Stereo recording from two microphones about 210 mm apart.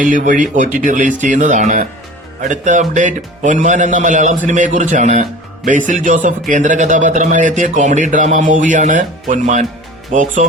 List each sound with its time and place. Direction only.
0.0 s a man's voice: 40° right (ahead or behind)